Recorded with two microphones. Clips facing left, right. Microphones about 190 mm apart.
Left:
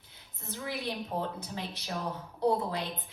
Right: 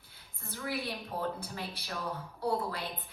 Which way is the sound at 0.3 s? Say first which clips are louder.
Left 1 dB; 20° left (ahead or behind).